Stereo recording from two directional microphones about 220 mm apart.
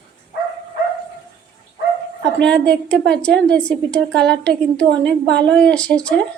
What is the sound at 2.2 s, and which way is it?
A woman's voice, 5° left (ahead or behind).